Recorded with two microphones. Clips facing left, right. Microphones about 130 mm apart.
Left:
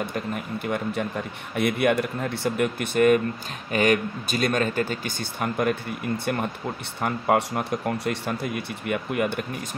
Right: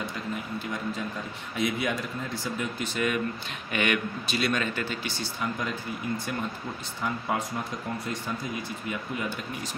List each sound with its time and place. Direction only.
0.0 s speech: 60° left (ahead or behind)
3.7 s speech: 40° left (ahead or behind); by 9.5 s 60° left (ahead or behind)